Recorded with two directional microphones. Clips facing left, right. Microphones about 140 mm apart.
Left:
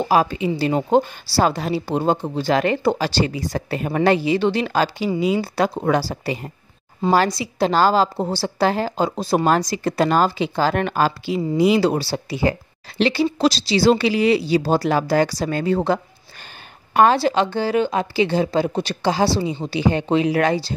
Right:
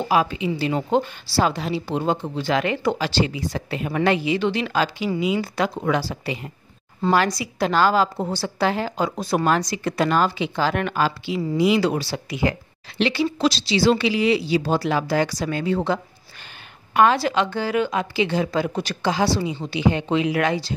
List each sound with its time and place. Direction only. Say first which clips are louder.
0.1 s a woman's voice: left 2 dB; 40° left (ahead or behind)
7.1 s a woman's voice: left 2 dB; 30° left (ahead or behind)